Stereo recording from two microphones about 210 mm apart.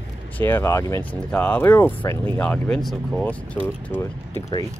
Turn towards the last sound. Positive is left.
turn(degrees=5)  # may be behind; listen again after turning